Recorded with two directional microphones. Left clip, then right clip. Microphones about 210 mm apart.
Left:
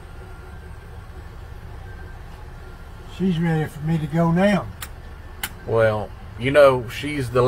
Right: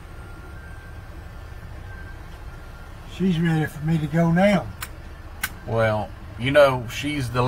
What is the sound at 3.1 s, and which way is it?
Speech, 15° right (ahead or behind).